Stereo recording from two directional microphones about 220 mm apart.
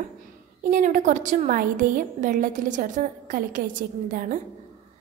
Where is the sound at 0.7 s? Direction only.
35° right (ahead or behind).